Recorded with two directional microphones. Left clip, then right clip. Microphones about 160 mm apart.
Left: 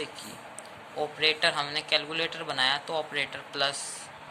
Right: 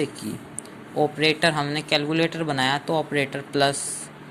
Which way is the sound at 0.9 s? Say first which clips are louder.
Right 6 dB; 30° right (ahead or behind).